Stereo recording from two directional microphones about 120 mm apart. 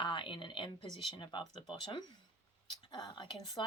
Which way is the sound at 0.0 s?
40° left (ahead or behind).